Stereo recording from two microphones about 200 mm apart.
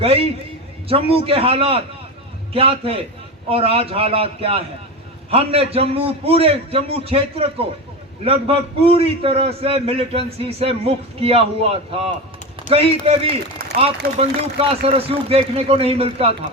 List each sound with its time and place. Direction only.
0.0 s a man's voice: 30° right (ahead or behind)